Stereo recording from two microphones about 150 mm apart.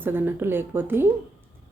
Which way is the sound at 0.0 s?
15° right (ahead or behind).